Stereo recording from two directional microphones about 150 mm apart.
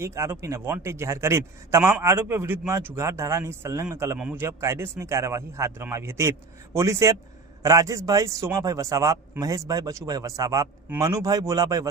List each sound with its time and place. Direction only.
0.0 s a man's voice: 20° right (ahead or behind)